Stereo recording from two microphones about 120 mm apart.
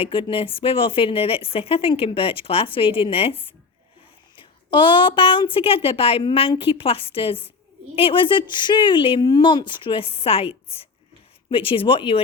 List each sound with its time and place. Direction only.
0.0 s speech: 45° left (ahead or behind)
4.7 s speech: 40° left (ahead or behind)